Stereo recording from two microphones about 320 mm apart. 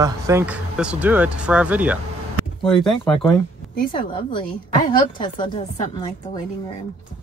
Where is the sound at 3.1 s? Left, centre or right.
Centre.